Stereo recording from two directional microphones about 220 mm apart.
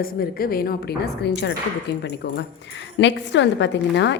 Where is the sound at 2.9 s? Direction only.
55° left (ahead or behind).